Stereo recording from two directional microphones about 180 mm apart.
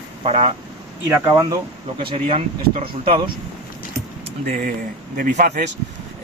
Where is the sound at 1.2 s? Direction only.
20° right (ahead or behind).